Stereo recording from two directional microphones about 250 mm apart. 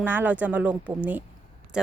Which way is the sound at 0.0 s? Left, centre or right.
Centre.